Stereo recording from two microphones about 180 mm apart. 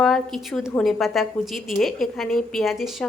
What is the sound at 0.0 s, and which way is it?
A woman's voice, centre (ahead or behind).